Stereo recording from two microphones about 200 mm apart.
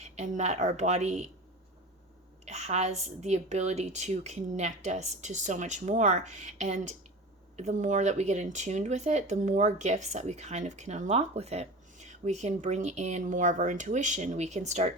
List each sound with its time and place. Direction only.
0.0 s speech: 35° right (ahead or behind)
2.4 s speech: 35° right (ahead or behind)